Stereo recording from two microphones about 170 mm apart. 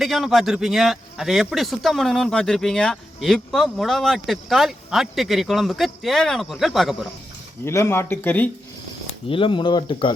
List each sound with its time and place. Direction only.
0.0 s a man's voice: centre (ahead or behind)
7.6 s speech: 15° left (ahead or behind)
9.0 s speech: 30° left (ahead or behind)